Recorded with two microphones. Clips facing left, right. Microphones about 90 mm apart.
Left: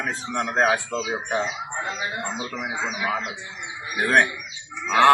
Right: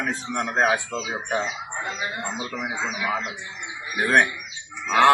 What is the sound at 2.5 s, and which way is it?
Speech, 10° left (ahead or behind).